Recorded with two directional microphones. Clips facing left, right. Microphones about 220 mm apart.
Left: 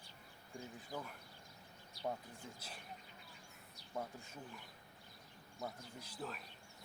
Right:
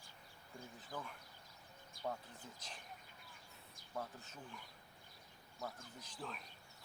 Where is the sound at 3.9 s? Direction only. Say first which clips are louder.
Left 2 dB; 10° left (ahead or behind).